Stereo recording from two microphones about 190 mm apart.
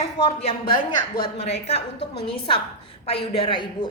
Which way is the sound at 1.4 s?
35° left (ahead or behind).